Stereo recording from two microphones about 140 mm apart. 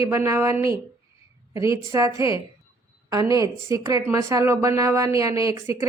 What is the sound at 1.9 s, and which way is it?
A woman's voice, 20° right (ahead or behind).